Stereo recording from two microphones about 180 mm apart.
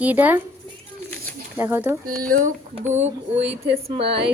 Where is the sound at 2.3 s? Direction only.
45° right (ahead or behind); by 4.3 s 30° right (ahead or behind).